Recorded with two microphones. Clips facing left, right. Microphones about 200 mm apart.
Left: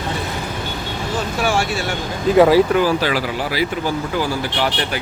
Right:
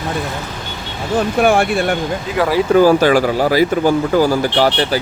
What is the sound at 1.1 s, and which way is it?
Speech, 55° right (ahead or behind).